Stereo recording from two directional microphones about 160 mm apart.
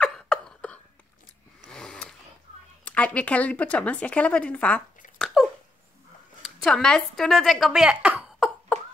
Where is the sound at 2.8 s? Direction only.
10° left (ahead or behind).